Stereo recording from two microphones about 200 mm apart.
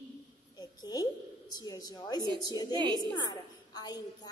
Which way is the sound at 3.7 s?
20° left (ahead or behind).